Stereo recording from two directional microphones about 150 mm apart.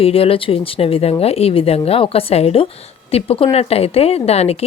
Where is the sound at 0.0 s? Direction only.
40° left (ahead or behind).